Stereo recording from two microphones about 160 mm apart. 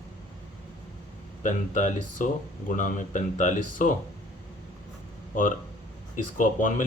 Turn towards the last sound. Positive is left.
turn(degrees=55)  # may be behind; listen again after turning